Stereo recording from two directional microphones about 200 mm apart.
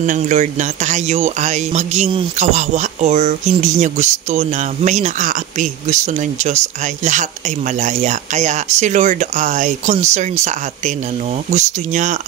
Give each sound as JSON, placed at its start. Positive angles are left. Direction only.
{"t": 0.0, "sound": "speech", "side_deg": -40}